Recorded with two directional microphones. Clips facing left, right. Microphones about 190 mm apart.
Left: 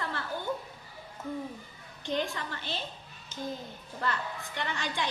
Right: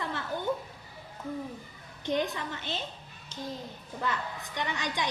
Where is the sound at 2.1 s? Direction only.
20° right (ahead or behind).